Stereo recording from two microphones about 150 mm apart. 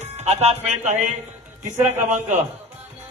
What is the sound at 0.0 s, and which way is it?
Speech, 45° right (ahead or behind).